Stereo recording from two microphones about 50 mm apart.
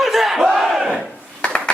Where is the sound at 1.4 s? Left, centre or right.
Left.